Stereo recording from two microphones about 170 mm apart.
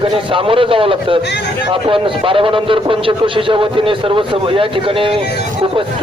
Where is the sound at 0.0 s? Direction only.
30° right (ahead or behind).